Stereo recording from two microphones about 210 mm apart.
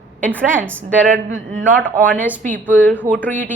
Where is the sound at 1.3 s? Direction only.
40° right (ahead or behind).